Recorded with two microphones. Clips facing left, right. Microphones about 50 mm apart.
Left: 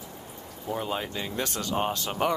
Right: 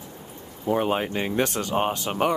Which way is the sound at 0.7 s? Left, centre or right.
Right.